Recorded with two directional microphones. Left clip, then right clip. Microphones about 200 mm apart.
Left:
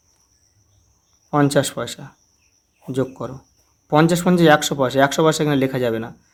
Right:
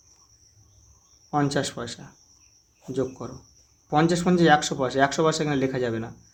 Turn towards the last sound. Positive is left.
turn(degrees=25)  # may be behind; listen again after turning